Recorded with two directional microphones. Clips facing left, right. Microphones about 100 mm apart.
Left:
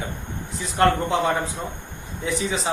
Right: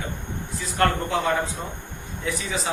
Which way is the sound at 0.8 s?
20° left (ahead or behind).